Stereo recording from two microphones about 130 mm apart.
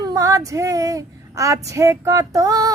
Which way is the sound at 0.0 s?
25° right (ahead or behind).